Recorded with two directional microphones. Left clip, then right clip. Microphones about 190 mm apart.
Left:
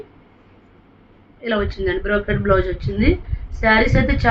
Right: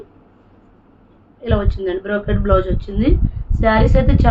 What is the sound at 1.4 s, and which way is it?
A woman's voice, 25° right (ahead or behind).